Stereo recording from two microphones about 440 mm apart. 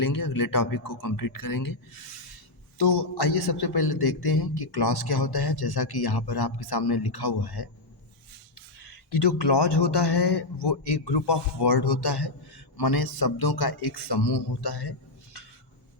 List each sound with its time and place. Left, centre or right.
0.0 s speech: left
2.7 s a man's voice: left
8.8 s a man's voice: left